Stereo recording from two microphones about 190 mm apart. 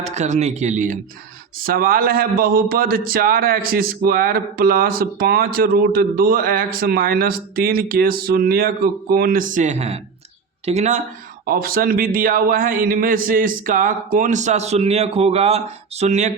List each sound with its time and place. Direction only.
0.0 s speech: 35° right (ahead or behind)
1.5 s a man's voice: 50° right (ahead or behind)
11.4 s a man's voice: 50° right (ahead or behind)